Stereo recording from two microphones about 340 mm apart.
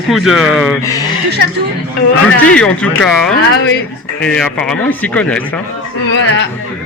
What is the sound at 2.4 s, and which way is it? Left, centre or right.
Speech, centre.